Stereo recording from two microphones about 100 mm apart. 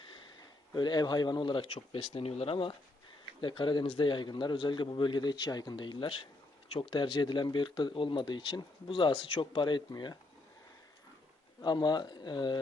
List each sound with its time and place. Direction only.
0.7 s speech: 45° left (ahead or behind); by 2.7 s 65° left (ahead or behind)
3.4 s speech: 55° left (ahead or behind)
11.6 s speech: 45° left (ahead or behind)